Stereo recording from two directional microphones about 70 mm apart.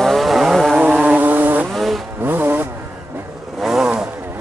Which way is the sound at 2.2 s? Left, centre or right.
Right.